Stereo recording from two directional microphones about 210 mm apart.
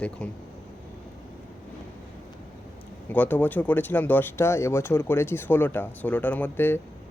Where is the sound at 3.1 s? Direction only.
10° left (ahead or behind).